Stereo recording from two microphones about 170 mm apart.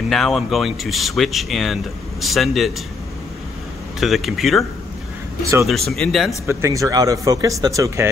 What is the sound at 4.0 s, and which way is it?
Speech, centre (ahead or behind).